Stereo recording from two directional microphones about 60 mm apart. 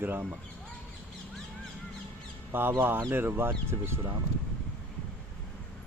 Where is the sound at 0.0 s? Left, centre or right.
Right.